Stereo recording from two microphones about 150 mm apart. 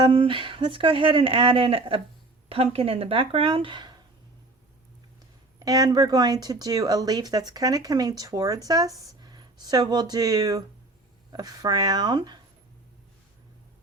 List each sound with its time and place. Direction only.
0.0 s speech: 35° right (ahead or behind)
5.5 s speech: 25° right (ahead or behind)